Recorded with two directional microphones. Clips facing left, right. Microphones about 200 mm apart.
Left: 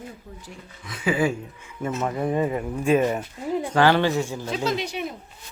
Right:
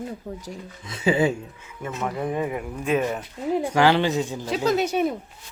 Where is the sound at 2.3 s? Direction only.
10° right (ahead or behind).